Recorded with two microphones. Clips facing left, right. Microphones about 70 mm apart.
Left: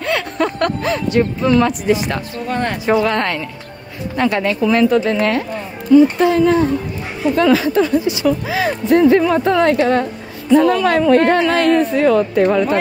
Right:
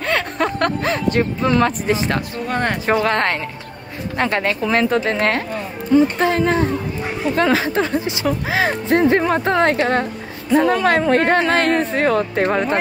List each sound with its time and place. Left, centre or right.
0.0 s speech: right